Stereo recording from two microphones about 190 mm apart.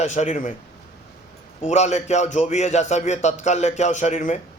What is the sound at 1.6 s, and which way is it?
A man's voice, 35° left (ahead or behind).